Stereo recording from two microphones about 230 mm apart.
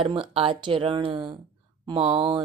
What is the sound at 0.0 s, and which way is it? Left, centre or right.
A woman's voice, right.